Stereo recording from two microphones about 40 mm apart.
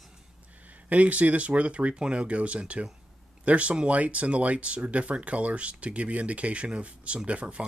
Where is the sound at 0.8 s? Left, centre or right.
Right.